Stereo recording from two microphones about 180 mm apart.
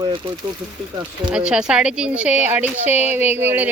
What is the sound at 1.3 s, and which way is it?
Speech, 5° right (ahead or behind).